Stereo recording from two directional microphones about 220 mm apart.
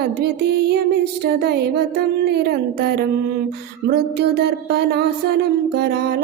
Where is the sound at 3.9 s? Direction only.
50° right (ahead or behind).